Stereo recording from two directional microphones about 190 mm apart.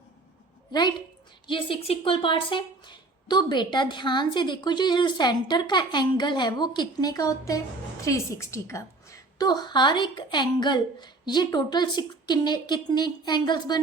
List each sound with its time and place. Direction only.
0.7 s speech: 20° left (ahead or behind)